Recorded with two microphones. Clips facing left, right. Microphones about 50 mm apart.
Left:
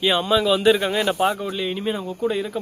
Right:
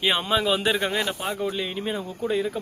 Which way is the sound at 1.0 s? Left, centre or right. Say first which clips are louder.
Left 8 dB; left.